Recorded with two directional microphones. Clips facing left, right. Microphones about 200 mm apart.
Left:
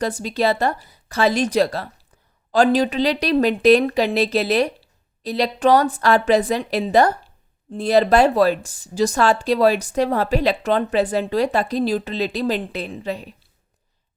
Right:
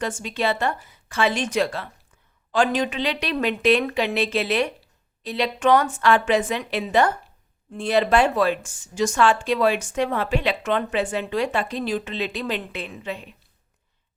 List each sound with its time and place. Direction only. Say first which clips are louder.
0.0 s speech: left 5 dB; 35° left (ahead or behind)